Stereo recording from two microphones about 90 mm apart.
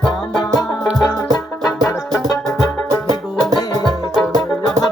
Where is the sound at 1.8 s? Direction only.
35° left (ahead or behind).